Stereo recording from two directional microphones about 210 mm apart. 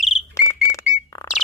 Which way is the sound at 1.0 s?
15° left (ahead or behind).